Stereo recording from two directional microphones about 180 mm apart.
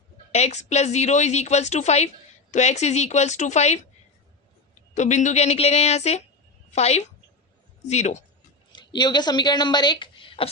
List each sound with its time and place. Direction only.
0.3 s a woman's voice: 35° left (ahead or behind)
4.9 s a woman's voice: 40° left (ahead or behind)
8.7 s speech: 25° left (ahead or behind)